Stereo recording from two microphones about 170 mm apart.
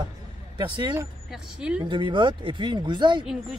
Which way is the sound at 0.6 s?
25° right (ahead or behind).